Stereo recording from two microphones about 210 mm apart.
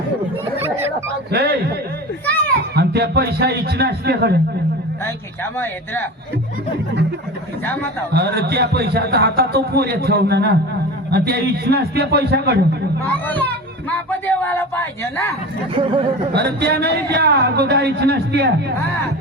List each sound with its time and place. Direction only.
1.3 s a man's voice: 50° right (ahead or behind)
2.2 s children playing: 10° left (ahead or behind)
2.7 s a man's voice: 50° right (ahead or behind)
5.0 s speech: 10° left (ahead or behind)
8.1 s a man's voice: 50° right (ahead or behind)
13.1 s speech: 10° left (ahead or behind)
16.3 s a man's voice: 50° right (ahead or behind)